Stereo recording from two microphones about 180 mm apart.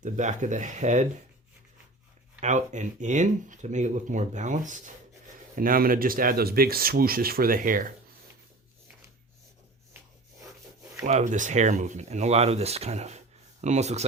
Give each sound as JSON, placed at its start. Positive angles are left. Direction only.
{"t": 0.0, "sound": "speech", "side_deg": -45}
{"t": 2.4, "sound": "speech", "side_deg": -40}
{"t": 11.0, "sound": "speech", "side_deg": -40}